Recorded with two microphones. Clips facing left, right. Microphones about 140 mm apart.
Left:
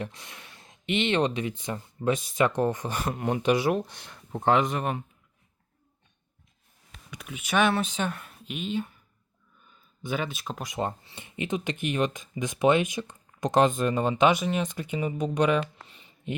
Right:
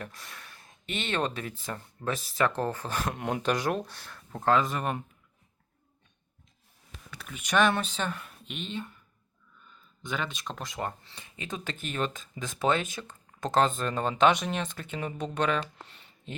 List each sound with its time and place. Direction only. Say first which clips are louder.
0.0 s speech: left 5 dB; 20° left (ahead or behind)
7.1 s speech: left 1 dB; 10° left (ahead or behind)
10.0 s speech: left 3 dB; 10° left (ahead or behind)